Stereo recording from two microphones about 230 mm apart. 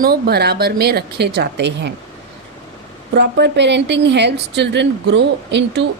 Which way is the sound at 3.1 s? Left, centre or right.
Right.